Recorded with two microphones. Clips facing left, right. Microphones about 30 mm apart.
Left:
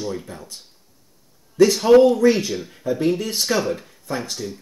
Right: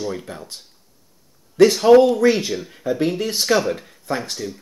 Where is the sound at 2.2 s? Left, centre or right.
Right.